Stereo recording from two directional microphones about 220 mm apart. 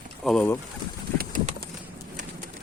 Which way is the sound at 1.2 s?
35° right (ahead or behind).